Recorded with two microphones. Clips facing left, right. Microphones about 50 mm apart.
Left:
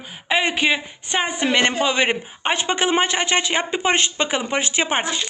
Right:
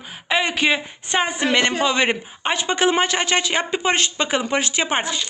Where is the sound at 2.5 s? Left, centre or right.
Left.